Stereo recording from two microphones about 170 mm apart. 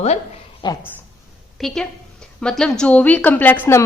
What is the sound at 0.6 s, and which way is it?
Speech, 25° left (ahead or behind).